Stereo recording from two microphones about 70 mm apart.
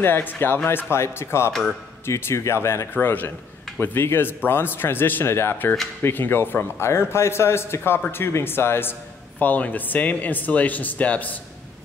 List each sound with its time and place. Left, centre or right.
0.0 s speech: left
2.9 s speech: left
9.4 s speech: left